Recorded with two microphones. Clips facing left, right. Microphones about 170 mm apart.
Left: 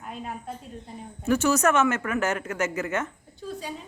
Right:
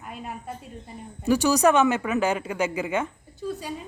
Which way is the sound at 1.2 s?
15° right (ahead or behind).